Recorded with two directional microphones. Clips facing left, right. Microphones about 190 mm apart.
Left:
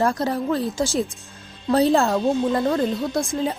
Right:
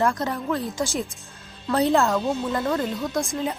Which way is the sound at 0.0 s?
35° left (ahead or behind).